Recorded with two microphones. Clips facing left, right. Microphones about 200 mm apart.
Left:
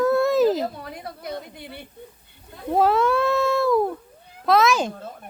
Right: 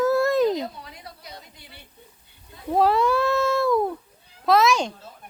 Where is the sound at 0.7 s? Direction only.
55° left (ahead or behind).